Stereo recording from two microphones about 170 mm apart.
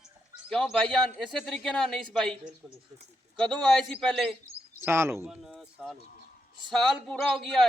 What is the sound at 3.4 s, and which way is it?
Speech, 5° left (ahead or behind).